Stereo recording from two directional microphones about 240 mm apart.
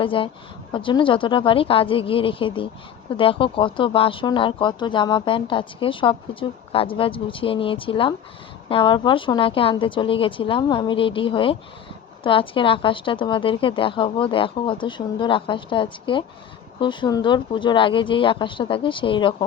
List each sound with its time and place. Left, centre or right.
0.0 s speech: left